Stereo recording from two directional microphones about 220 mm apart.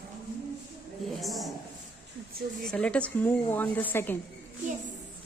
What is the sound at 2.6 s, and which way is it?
Speech, 5° left (ahead or behind).